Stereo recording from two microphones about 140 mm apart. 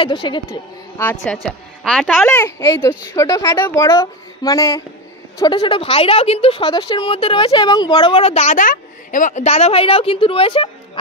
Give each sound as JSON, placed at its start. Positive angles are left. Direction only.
{"t": 0.0, "sound": "speech", "side_deg": 35}
{"t": 1.2, "sound": "a woman's voice", "side_deg": 0}
{"t": 2.3, "sound": "a woman's voice", "side_deg": 20}
{"t": 5.5, "sound": "a woman's voice", "side_deg": 35}